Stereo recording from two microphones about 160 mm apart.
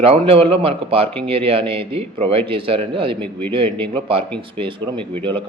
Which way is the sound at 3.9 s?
35° right (ahead or behind).